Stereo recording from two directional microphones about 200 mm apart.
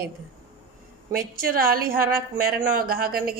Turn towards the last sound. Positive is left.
turn(degrees=-50)  # may be behind; listen again after turning